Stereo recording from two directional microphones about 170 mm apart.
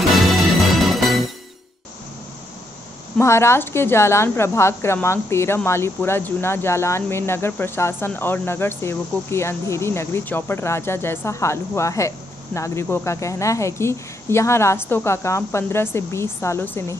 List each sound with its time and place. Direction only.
0.1 s music: centre (ahead or behind)
3.2 s speech: 15° left (ahead or behind)